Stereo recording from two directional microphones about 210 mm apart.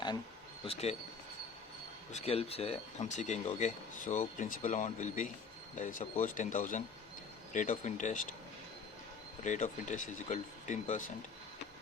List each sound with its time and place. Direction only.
0.6 s speech: 30° left (ahead or behind)
2.1 s speech: 30° left (ahead or behind)
9.4 s speech: 35° left (ahead or behind)